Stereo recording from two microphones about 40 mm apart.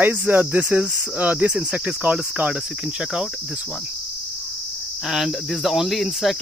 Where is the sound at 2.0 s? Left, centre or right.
Right.